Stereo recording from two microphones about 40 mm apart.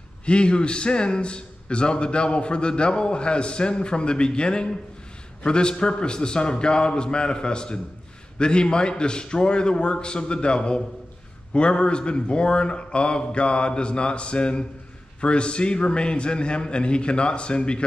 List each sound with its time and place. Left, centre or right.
0.2 s a man's voice: left